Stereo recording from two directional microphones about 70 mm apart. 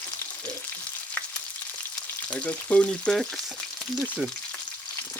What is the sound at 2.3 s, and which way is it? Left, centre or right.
Speech, centre.